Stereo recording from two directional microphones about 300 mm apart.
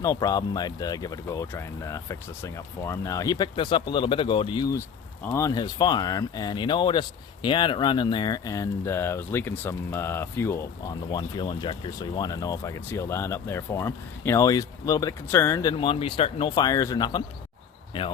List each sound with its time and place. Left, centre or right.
0.0 s speech: centre